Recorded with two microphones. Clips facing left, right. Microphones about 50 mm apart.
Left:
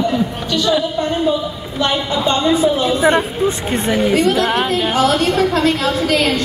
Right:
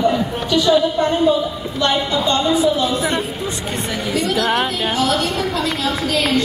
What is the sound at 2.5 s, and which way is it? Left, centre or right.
A woman's voice, left.